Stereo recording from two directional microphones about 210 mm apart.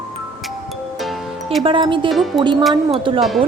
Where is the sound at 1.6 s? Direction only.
25° right (ahead or behind).